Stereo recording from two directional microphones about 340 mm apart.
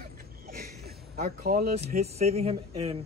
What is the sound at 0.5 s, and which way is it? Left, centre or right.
Speech, right.